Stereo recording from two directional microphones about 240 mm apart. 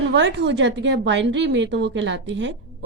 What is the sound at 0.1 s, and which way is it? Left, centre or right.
A woman's voice, right.